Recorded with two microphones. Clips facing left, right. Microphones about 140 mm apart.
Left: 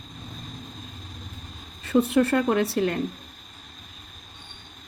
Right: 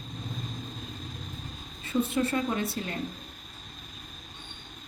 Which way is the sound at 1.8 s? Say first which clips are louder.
Left 7 dB; 70° left (ahead or behind).